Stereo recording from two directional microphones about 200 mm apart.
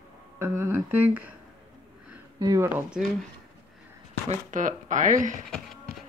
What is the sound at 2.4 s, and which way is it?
Speech, 15° right (ahead or behind).